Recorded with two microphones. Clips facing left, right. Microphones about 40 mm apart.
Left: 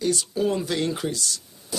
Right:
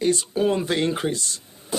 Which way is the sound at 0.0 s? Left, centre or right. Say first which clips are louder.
Right 3 dB; right.